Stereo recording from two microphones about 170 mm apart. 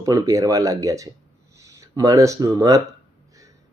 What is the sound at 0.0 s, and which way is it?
Speech, 20° right (ahead or behind).